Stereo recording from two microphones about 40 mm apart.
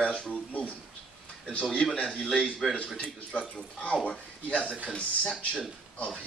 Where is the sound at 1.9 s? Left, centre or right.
Centre.